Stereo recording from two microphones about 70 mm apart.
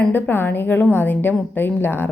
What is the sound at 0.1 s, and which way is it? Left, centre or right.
A woman's voice, left.